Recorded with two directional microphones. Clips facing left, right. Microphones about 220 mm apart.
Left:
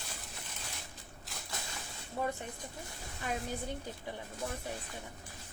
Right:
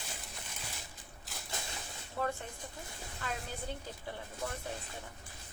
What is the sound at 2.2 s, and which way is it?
Speech, 20° left (ahead or behind).